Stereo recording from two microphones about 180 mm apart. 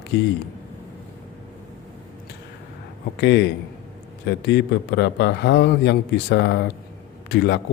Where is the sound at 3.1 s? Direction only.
70° left (ahead or behind).